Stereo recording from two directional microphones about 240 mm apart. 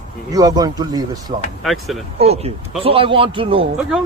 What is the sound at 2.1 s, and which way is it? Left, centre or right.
A man's voice, right.